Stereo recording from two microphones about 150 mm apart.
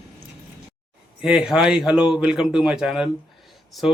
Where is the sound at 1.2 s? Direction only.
5° right (ahead or behind).